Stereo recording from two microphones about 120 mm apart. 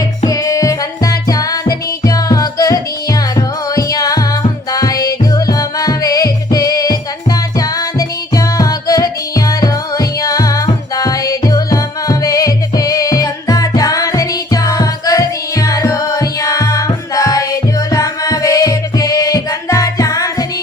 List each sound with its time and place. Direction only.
0.3 s music: 30° left (ahead or behind)